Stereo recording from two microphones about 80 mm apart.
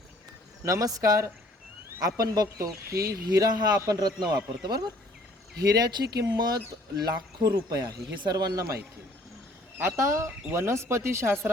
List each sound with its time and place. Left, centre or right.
0.6 s speech: right
9.9 s speech: right